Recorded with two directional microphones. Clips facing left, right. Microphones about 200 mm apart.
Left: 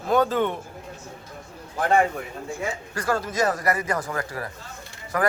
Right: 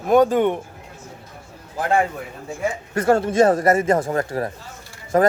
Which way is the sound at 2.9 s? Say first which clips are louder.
Right 10 dB; 25° right (ahead or behind).